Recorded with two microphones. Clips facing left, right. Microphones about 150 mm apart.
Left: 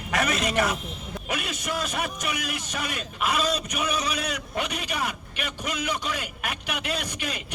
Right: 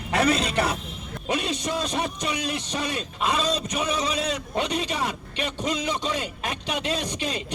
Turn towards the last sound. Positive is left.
turn(degrees=-30)  # may be behind; listen again after turning